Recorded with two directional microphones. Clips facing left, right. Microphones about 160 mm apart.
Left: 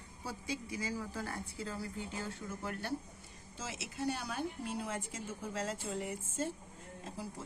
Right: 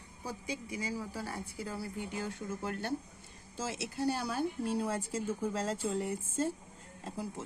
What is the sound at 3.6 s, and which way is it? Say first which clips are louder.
Speech: right 5 dB; 35° right (ahead or behind).